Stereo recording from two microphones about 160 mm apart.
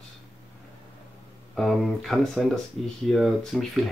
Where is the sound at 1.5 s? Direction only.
Centre (ahead or behind).